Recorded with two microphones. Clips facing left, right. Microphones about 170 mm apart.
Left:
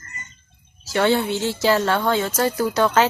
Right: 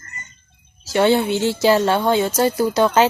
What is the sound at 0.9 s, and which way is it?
Speech, 15° right (ahead or behind).